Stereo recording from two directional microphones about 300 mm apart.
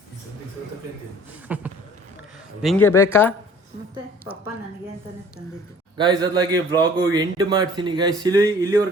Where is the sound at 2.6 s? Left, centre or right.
Centre.